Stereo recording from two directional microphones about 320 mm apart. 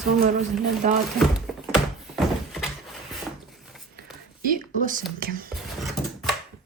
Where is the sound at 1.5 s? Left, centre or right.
Centre.